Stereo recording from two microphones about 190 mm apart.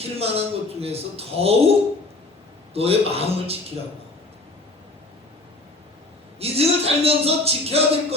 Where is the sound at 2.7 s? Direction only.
30° right (ahead or behind).